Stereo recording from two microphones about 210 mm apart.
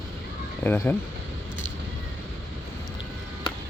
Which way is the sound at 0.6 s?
10° left (ahead or behind).